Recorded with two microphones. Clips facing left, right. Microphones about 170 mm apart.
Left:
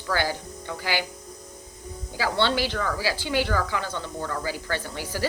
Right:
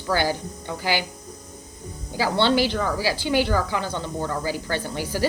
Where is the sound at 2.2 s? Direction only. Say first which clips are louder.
Right 4 dB; 15° right (ahead or behind).